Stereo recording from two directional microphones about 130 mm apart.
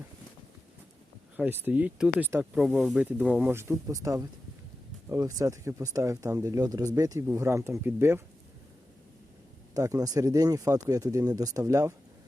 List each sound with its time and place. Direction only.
1.4 s speech: 15° right (ahead or behind)
9.7 s speech: 25° right (ahead or behind)